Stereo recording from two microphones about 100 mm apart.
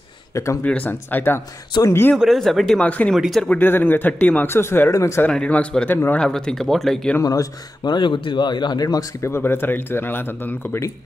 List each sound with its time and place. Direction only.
0.3 s speech: 30° left (ahead or behind)
0.7 s speech: 15° left (ahead or behind)
2.1 s speech: centre (ahead or behind)
3.4 s speech: 15° left (ahead or behind)
5.3 s speech: 10° left (ahead or behind)
7.2 s speech: 40° left (ahead or behind)
9.2 s speech: 25° left (ahead or behind)